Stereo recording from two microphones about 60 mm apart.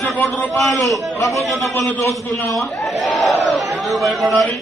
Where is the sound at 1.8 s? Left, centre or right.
Left.